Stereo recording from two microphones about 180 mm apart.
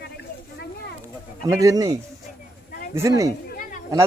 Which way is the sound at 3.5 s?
50° left (ahead or behind).